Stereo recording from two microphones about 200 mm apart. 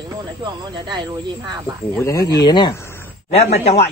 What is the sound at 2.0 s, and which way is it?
A man's voice, 15° left (ahead or behind).